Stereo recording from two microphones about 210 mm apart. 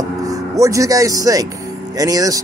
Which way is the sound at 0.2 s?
15° right (ahead or behind).